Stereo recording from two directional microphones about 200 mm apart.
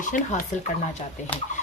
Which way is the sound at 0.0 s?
40° left (ahead or behind).